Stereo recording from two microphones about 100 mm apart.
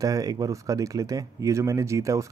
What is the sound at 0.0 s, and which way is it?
Speech, 40° right (ahead or behind).